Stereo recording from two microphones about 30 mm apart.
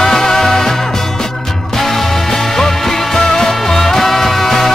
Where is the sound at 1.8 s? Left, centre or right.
Centre.